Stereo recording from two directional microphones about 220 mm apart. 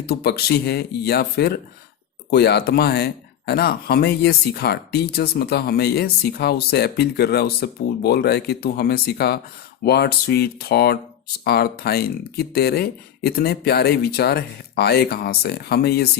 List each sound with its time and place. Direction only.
0.0 s speech: 45° left (ahead or behind)